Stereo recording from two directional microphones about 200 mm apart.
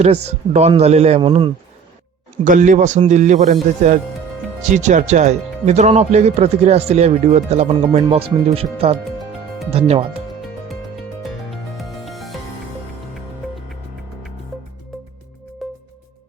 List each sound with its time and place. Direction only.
0.5 s speech: 30° right (ahead or behind)
2.4 s speech: 40° right (ahead or behind)
11.2 s music: centre (ahead or behind)
15.6 s music: centre (ahead or behind)